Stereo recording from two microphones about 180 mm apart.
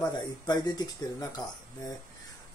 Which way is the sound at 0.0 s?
20° left (ahead or behind).